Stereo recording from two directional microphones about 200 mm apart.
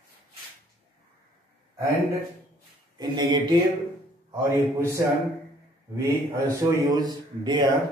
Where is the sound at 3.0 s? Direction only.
20° right (ahead or behind).